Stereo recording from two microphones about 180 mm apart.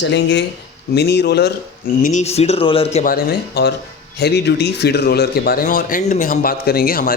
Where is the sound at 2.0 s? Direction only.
40° left (ahead or behind).